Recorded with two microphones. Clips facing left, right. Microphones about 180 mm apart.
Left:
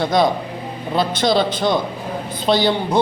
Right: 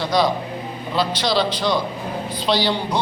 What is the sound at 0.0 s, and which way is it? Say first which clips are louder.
A man's voice: left 3 dB; 50° left (ahead or behind).